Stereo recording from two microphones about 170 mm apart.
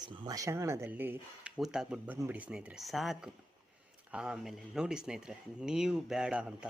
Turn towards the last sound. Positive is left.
turn(degrees=-5)  # may be behind; listen again after turning